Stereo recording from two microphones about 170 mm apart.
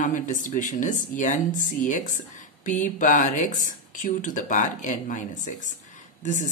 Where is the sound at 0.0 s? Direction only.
50° left (ahead or behind).